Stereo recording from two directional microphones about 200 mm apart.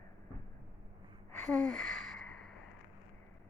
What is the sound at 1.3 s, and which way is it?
Sigh, 5° left (ahead or behind).